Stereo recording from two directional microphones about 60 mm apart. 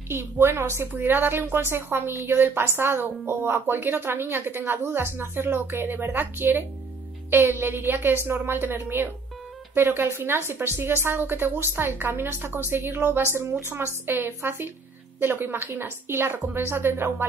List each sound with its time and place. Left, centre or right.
0.1 s a woman's voice: right